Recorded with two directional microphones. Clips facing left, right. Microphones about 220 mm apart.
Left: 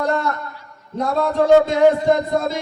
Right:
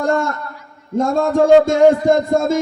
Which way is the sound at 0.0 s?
45° right (ahead or behind).